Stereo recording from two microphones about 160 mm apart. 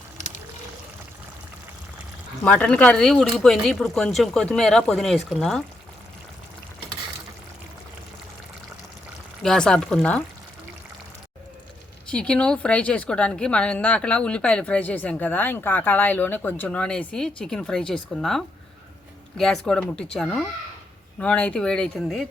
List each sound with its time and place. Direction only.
0.2 s pour: 50° left (ahead or behind)
2.4 s speech: 10° left (ahead or behind)
9.4 s speech: 5° left (ahead or behind)
12.1 s a woman's voice: 5° left (ahead or behind)